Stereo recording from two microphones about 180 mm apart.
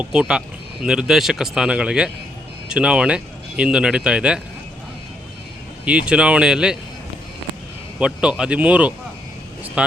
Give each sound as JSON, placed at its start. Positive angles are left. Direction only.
{"t": 0.0, "sound": "speech", "side_deg": -5}
{"t": 5.8, "sound": "speech", "side_deg": -5}
{"t": 7.9, "sound": "speech", "side_deg": -5}